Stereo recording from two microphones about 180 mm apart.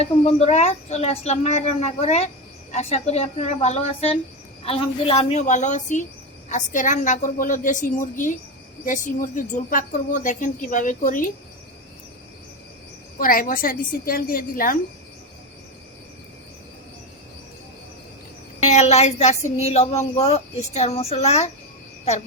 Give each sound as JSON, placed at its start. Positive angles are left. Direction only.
{"t": 0.0, "sound": "a woman's voice", "side_deg": 35}
{"t": 13.1, "sound": "a woman's voice", "side_deg": 50}
{"t": 18.6, "sound": "speech", "side_deg": 40}